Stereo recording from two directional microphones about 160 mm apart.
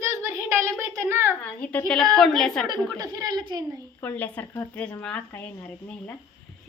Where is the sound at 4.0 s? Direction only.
10° left (ahead or behind).